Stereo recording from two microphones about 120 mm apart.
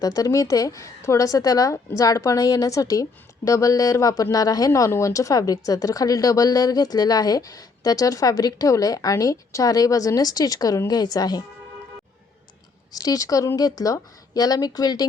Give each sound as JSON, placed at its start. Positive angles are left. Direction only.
{"t": 0.0, "sound": "a woman's voice", "side_deg": 30}
{"t": 12.9, "sound": "a woman's voice", "side_deg": 30}